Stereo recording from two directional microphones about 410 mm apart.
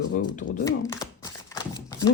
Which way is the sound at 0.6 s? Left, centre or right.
Centre.